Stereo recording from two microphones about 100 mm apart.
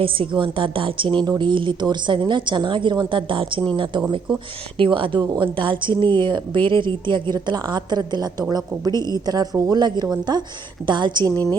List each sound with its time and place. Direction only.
0.0 s a woman's voice: 55° right (ahead or behind)
5.2 s a woman's voice: 40° right (ahead or behind)
5.5 s a woman's voice: 55° right (ahead or behind)